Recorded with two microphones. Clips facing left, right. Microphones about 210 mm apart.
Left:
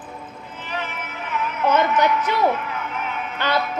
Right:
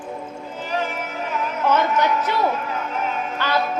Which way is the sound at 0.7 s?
40° right (ahead or behind).